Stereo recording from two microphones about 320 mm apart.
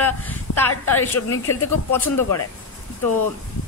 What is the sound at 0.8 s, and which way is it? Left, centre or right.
Speech, centre.